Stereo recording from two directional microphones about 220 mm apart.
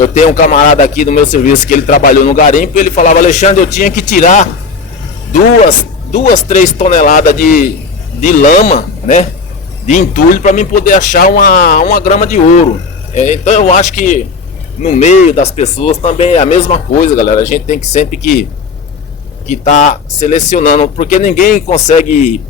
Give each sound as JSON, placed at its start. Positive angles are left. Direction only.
{"t": 0.0, "sound": "a man's voice", "side_deg": 35}
{"t": 19.5, "sound": "a man's voice", "side_deg": 35}